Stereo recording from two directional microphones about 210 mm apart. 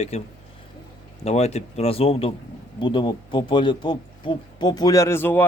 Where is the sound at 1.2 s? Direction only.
30° left (ahead or behind).